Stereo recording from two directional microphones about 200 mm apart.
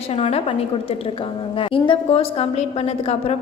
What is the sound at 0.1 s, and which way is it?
A woman's voice, 30° left (ahead or behind).